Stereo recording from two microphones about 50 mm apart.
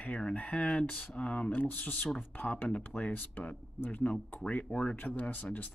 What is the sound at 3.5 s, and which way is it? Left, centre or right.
Speech, left.